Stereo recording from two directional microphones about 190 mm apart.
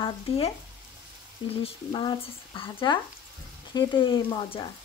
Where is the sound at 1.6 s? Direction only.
25° left (ahead or behind).